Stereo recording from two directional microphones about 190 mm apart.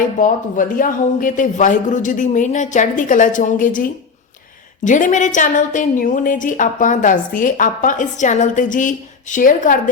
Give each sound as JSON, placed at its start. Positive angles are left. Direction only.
{"t": 0.2, "sound": "a woman's voice", "side_deg": 45}